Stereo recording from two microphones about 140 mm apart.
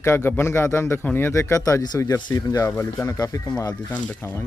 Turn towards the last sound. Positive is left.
turn(degrees=15)  # may be behind; listen again after turning